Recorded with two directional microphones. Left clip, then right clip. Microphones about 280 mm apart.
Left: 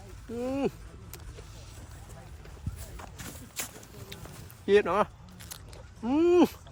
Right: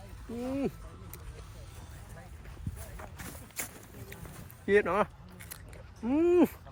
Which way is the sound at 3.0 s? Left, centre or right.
Centre.